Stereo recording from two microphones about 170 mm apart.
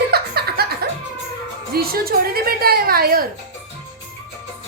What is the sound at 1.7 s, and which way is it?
A woman's voice, 60° right (ahead or behind).